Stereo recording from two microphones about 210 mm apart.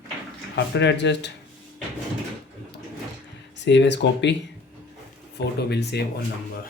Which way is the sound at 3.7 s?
55° left (ahead or behind).